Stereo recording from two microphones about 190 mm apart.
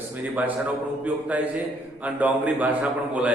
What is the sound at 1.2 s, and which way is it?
A man's voice, 5° right (ahead or behind).